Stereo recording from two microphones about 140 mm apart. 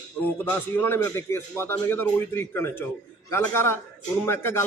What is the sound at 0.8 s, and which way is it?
A man's voice, 15° left (ahead or behind).